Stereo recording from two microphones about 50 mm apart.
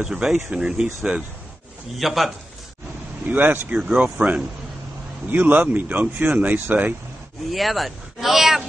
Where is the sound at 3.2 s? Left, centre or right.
Right.